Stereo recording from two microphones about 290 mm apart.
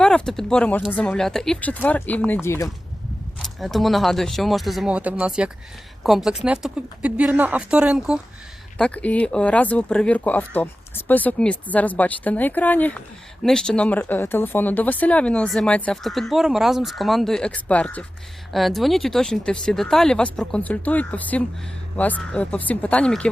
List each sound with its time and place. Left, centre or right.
0.0 s speech: centre